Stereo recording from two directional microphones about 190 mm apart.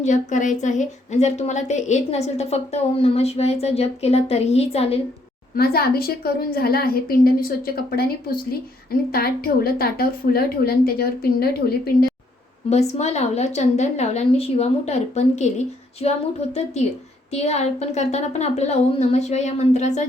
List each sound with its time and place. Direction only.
0.0 s a woman's voice: 40° left (ahead or behind)
5.5 s a woman's voice: 55° left (ahead or behind)
12.7 s a woman's voice: 35° left (ahead or behind)